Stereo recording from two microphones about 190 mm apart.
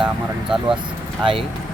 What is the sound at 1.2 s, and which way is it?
Speech, 30° right (ahead or behind).